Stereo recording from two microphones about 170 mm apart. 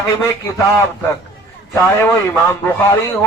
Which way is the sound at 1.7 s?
15° left (ahead or behind).